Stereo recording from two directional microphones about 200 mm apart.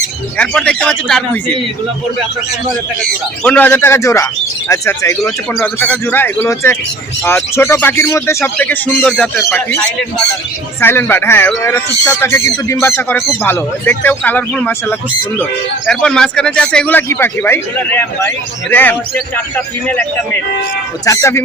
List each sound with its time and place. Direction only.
0.3 s a man's voice: 5° left (ahead or behind)
3.4 s speech: 10° left (ahead or behind)